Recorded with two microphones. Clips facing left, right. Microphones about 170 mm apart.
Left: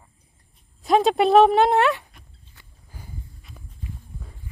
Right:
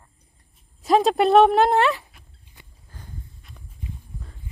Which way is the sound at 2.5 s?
15° right (ahead or behind).